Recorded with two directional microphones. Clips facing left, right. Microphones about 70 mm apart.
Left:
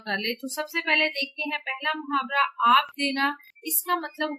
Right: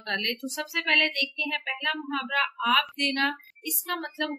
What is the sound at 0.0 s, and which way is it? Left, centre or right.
A woman's voice, centre.